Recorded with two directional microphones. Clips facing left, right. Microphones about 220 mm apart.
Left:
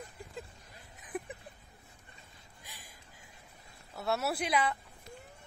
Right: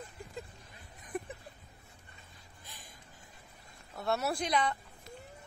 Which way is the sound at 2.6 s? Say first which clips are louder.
Even; 10° left (ahead or behind).